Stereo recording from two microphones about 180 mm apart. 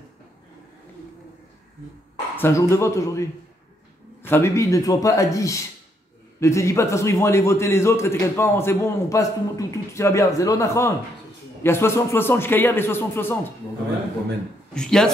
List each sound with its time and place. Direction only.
2.3 s a man's voice: 15° left (ahead or behind)
14.7 s speech: 5° left (ahead or behind)